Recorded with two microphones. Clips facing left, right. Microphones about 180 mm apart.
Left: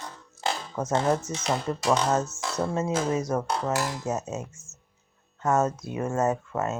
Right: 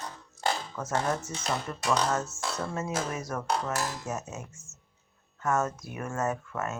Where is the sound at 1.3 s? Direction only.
25° left (ahead or behind).